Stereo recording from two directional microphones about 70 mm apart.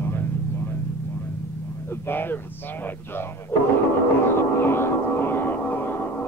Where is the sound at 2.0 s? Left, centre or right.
Left.